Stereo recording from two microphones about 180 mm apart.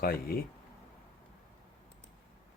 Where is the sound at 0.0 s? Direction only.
55° left (ahead or behind).